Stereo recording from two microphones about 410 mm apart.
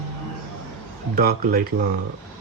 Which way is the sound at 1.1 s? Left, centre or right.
Right.